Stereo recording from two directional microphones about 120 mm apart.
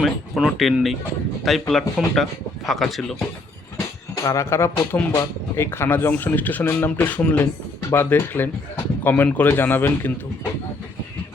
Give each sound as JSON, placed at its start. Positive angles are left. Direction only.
{"t": 0.0, "sound": "speech", "side_deg": 0}
{"t": 3.8, "sound": "speech", "side_deg": 25}